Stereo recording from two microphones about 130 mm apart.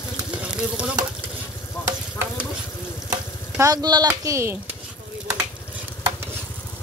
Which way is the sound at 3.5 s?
25° right (ahead or behind).